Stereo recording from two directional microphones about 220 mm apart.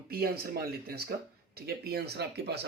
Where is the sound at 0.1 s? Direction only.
45° right (ahead or behind).